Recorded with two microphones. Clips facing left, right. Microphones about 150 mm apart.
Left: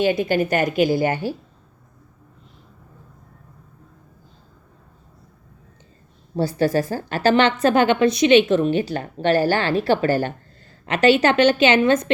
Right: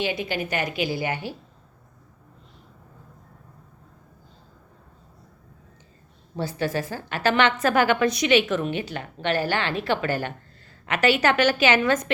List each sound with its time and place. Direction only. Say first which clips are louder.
0.0 s a woman's voice: left 8 dB; 45° left (ahead or behind)
6.3 s a woman's voice: left 7 dB; 35° left (ahead or behind)